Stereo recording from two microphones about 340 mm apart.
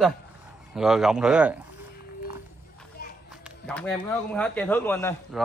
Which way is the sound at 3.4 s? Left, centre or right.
Centre.